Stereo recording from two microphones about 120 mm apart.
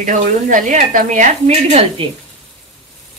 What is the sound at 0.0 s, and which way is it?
Speech, 90° right.